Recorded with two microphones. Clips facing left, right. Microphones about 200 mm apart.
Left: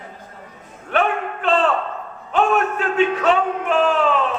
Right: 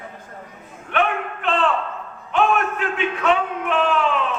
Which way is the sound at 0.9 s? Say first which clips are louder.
Left 2 dB; 40° left (ahead or behind).